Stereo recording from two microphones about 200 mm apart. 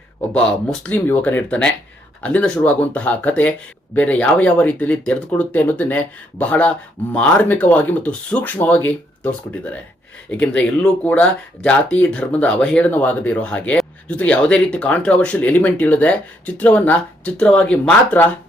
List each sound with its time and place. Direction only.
0.3 s speech: 5° left (ahead or behind)